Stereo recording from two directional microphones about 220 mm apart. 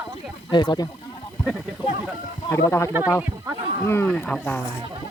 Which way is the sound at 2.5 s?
10° left (ahead or behind).